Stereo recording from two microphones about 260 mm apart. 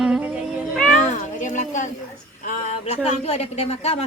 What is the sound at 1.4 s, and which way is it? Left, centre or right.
A woman's voice, left.